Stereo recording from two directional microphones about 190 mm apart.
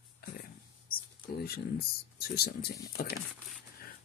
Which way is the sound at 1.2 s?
55° left (ahead or behind).